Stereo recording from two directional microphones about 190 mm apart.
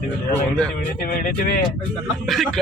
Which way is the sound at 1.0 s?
50° left (ahead or behind).